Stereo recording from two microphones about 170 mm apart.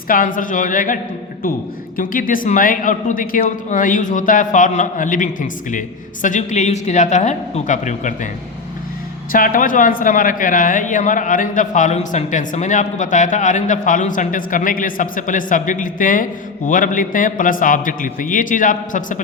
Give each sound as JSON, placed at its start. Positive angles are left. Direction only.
{"t": 0.1, "sound": "a man's voice", "side_deg": 55}
{"t": 2.0, "sound": "a man's voice", "side_deg": 55}
{"t": 9.3, "sound": "a man's voice", "side_deg": 55}